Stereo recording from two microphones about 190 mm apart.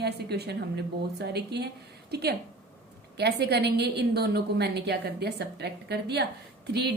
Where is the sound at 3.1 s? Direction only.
60° right (ahead or behind).